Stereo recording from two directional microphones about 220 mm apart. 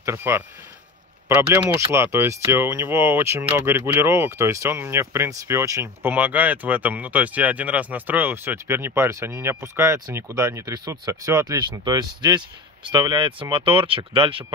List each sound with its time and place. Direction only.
0.0 s speech: 10° right (ahead or behind)
1.8 s speech: 15° right (ahead or behind)